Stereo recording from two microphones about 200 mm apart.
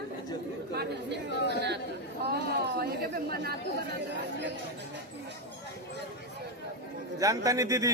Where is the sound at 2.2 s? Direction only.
50° right (ahead or behind).